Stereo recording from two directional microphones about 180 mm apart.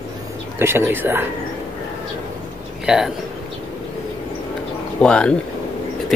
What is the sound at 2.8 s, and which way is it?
Speech, 5° right (ahead or behind).